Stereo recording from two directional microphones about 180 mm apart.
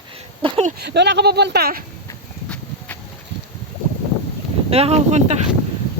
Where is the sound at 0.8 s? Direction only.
70° right (ahead or behind).